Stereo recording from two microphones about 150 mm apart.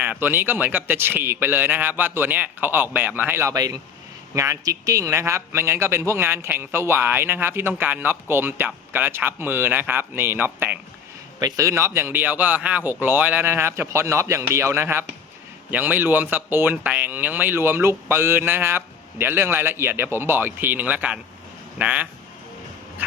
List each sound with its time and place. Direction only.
0.0 s a man's voice: 10° right (ahead or behind)
11.3 s a man's voice: 25° right (ahead or behind)